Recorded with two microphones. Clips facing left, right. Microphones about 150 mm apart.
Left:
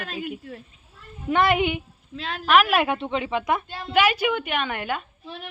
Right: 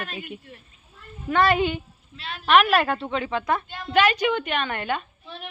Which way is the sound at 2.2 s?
90° left.